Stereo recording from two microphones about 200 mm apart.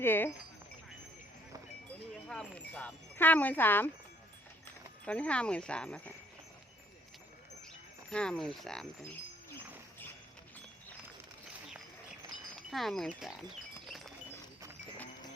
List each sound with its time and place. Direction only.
0.0 s speech: 10° left (ahead or behind)
2.2 s speech: 5° left (ahead or behind)
5.0 s speech: 5° left (ahead or behind)
8.1 s speech: 5° left (ahead or behind)
12.5 s speech: centre (ahead or behind)
13.8 s wind chime: centre (ahead or behind)